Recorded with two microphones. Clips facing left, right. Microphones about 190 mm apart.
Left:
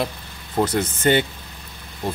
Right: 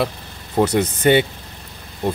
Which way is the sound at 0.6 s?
10° right (ahead or behind).